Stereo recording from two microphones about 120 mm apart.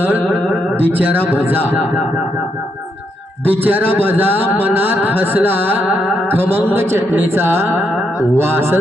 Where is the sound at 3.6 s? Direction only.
15° right (ahead or behind).